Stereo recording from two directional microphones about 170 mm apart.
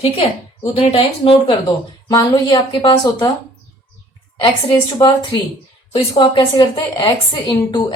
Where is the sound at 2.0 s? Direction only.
25° left (ahead or behind).